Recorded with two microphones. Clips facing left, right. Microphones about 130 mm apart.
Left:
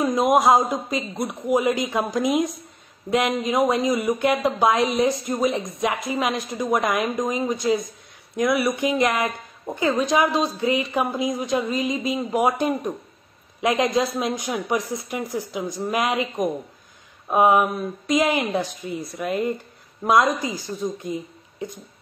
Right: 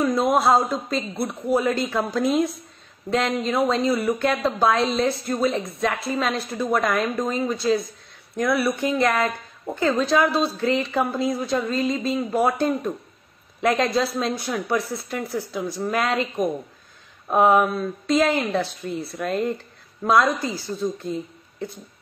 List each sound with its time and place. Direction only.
0.0 s a woman's voice: 15° left (ahead or behind)